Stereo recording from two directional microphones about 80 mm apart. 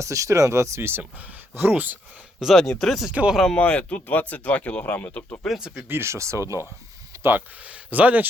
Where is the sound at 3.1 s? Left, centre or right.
Centre.